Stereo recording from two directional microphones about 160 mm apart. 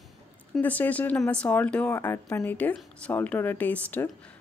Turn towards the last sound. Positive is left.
turn(degrees=10)  # may be behind; listen again after turning